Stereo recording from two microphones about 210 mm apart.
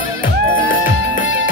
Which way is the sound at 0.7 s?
40° left (ahead or behind).